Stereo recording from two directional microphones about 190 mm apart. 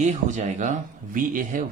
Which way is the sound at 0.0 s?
40° right (ahead or behind).